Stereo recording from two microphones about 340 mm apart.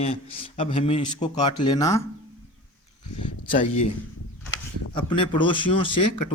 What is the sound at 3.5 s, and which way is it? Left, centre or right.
Speech, centre.